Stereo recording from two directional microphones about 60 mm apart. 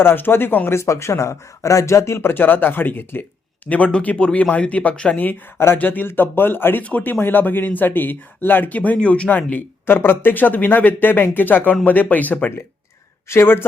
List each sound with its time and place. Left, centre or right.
0.0 s a man's voice: left
0.7 s speech: left
2.3 s a man's voice: left
3.7 s speech: left
5.5 s speech: left
5.8 s a man's voice: left
9.3 s a man's voice: left
13.2 s a man's voice: left